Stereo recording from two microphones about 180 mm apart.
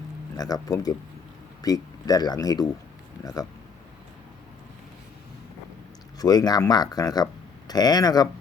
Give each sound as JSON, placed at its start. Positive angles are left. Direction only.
{"t": 0.3, "sound": "speech", "side_deg": 20}
{"t": 6.1, "sound": "speech", "side_deg": 20}